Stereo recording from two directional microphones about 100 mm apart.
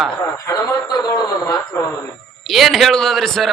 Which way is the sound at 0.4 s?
35° left (ahead or behind).